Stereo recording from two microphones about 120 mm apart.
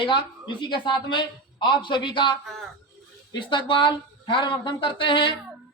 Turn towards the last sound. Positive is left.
turn(degrees=45)  # may be behind; listen again after turning